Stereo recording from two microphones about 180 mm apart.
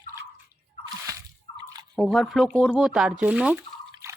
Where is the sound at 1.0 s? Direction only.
20° right (ahead or behind).